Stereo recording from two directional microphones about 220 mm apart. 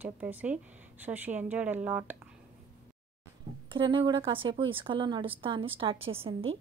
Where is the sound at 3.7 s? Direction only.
20° right (ahead or behind).